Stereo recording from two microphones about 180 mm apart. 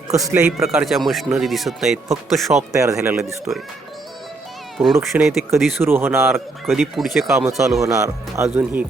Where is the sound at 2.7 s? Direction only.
15° right (ahead or behind).